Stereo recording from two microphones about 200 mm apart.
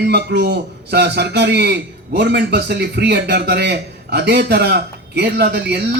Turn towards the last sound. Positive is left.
turn(degrees=-55)  # may be behind; listen again after turning